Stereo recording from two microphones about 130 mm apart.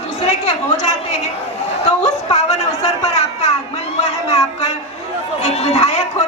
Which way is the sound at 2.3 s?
60° left (ahead or behind).